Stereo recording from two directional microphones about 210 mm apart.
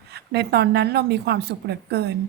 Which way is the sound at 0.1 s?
50° right (ahead or behind).